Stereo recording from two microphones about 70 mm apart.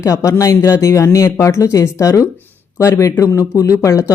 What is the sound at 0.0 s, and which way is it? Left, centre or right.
Speech, left.